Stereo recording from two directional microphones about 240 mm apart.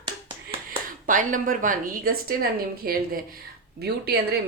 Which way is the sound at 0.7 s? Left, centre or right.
Right.